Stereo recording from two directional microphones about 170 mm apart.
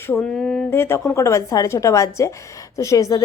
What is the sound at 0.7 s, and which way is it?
A woman's voice, 15° left (ahead or behind).